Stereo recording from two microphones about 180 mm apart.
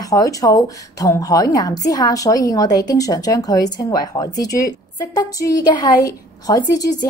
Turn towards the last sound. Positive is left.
turn(degrees=20)  # may be behind; listen again after turning